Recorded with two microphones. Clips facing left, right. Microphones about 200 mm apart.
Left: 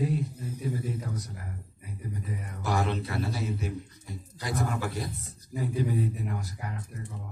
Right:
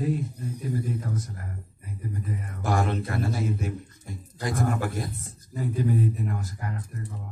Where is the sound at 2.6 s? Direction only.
50° right (ahead or behind).